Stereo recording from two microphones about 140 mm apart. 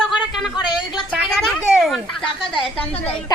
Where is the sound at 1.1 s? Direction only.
5° right (ahead or behind).